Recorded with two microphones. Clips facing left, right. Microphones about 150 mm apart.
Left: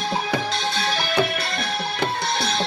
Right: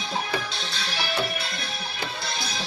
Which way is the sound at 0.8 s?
60° left (ahead or behind).